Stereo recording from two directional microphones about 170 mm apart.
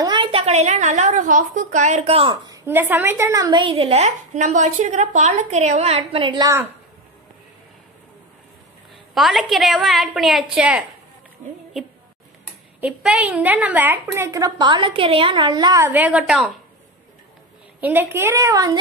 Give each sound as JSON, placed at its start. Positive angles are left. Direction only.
{"t": 0.0, "sound": "a woman's voice", "side_deg": -30}
{"t": 2.6, "sound": "a woman's voice", "side_deg": -10}
{"t": 3.6, "sound": "a woman's voice", "side_deg": -35}
{"t": 9.1, "sound": "a woman's voice", "side_deg": 0}
{"t": 12.8, "sound": "a woman's voice", "side_deg": -10}
{"t": 17.7, "sound": "a woman's voice", "side_deg": -10}